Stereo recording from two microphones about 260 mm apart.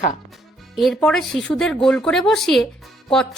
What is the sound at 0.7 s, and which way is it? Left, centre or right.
Speech, centre.